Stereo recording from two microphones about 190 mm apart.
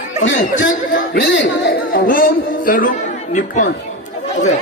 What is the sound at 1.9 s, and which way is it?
A man's voice, 50° left (ahead or behind).